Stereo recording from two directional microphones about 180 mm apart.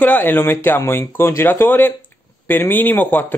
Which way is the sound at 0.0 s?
10° left (ahead or behind).